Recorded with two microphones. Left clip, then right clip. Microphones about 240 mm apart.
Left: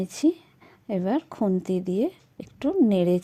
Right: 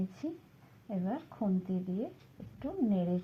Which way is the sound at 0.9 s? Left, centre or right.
Left.